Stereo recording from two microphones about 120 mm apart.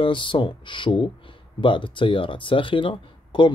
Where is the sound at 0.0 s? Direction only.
45° left (ahead or behind).